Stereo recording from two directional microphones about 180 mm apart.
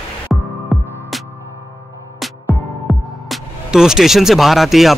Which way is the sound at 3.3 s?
5° right (ahead or behind).